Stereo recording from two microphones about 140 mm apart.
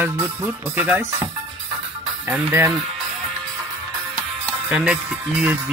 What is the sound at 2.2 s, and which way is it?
Speech, 15° right (ahead or behind).